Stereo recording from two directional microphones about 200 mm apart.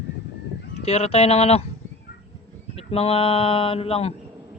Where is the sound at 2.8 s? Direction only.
30° left (ahead or behind).